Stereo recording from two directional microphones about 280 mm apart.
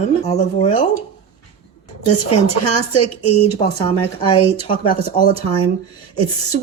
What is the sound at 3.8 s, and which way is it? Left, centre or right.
Speech, centre.